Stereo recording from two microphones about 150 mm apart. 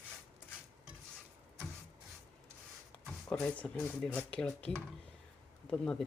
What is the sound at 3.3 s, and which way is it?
Speech, 10° left (ahead or behind).